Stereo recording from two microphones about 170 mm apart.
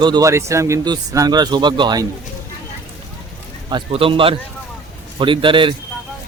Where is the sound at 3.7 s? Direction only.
30° right (ahead or behind).